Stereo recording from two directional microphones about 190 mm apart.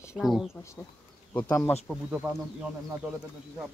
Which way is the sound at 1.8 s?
5° right (ahead or behind).